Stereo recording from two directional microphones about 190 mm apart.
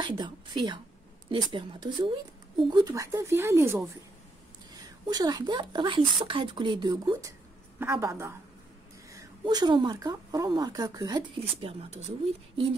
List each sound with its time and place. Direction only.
0.0 s a woman's voice: 25° right (ahead or behind)
5.0 s a woman's voice: 20° right (ahead or behind)